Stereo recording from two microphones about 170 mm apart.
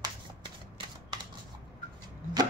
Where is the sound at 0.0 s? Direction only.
25° right (ahead or behind).